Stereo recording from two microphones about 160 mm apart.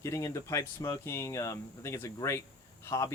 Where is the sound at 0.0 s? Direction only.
20° left (ahead or behind).